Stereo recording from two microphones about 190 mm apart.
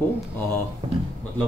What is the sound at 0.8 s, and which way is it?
Speech, 35° right (ahead or behind).